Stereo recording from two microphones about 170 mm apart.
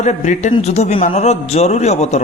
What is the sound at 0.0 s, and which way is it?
Speech, 45° left (ahead or behind).